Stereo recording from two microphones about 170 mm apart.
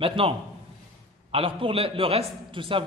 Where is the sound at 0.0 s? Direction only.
30° right (ahead or behind).